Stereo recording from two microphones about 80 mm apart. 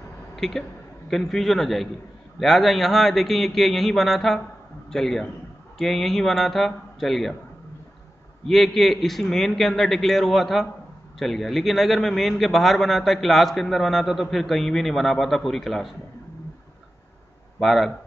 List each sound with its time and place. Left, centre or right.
0.4 s a man's voice: centre
8.5 s a man's voice: centre
17.6 s a man's voice: centre